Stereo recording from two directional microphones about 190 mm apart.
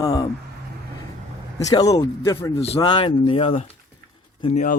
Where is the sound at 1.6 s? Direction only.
20° left (ahead or behind).